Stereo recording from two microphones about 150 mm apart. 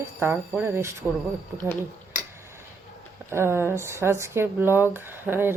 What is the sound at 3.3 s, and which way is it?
Speech, 15° right (ahead or behind).